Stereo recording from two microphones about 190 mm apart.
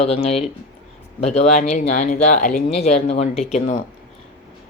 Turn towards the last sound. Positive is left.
turn(degrees=40)  # may be behind; listen again after turning